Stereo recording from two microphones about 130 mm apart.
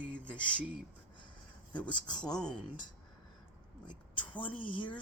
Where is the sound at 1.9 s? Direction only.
35° left (ahead or behind).